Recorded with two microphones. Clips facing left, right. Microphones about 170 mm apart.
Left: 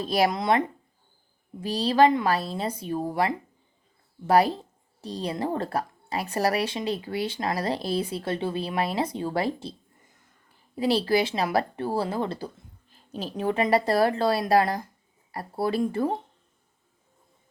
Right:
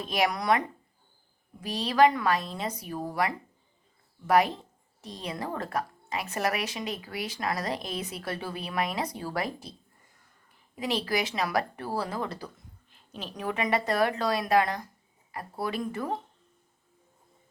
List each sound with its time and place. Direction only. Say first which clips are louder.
0.0 s speech: left 4 dB; 35° left (ahead or behind)
1.6 s speech: left 3 dB; 30° left (ahead or behind)
10.8 s speech: left 6 dB; 30° left (ahead or behind)